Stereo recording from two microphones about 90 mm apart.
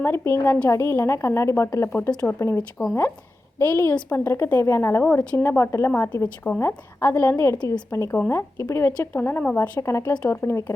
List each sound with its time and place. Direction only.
0.0 s a woman's voice: 25° left (ahead or behind)
1.9 s speech: 15° left (ahead or behind)
3.6 s speech: 25° left (ahead or behind)
5.9 s speech: 20° left (ahead or behind)
6.6 s a woman's voice: 30° left (ahead or behind)
9.8 s a woman's voice: 35° left (ahead or behind)